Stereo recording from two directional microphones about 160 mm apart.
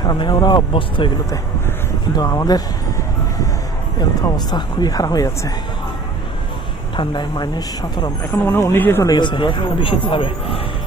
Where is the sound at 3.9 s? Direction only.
25° left (ahead or behind).